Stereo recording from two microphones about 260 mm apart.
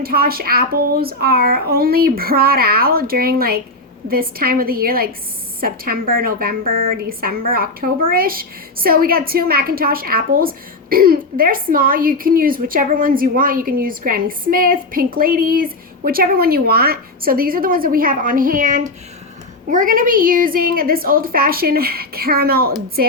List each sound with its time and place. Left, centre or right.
0.0 s a woman's voice: right